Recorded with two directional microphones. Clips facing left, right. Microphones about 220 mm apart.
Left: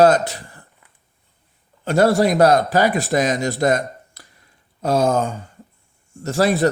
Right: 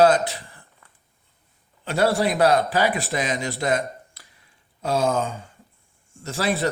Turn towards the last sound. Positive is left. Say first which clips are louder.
# left 7 dB
turn(degrees=45)  # may be behind; listen again after turning